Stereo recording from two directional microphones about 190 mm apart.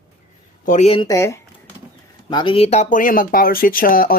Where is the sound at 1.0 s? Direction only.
15° left (ahead or behind).